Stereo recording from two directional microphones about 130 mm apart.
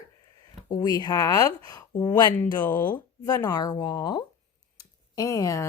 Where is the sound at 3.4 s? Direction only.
30° left (ahead or behind).